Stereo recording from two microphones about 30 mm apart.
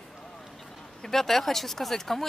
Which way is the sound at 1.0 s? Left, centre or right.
Centre.